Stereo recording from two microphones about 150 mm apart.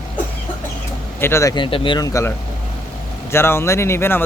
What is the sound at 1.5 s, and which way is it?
Speech, 35° left (ahead or behind).